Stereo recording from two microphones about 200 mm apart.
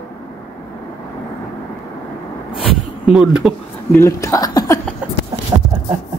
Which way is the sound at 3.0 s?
5° right (ahead or behind).